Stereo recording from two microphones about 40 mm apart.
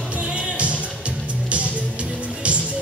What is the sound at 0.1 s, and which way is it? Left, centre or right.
Music, right.